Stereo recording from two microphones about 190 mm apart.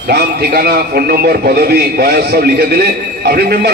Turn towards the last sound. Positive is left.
turn(degrees=-55)  # may be behind; listen again after turning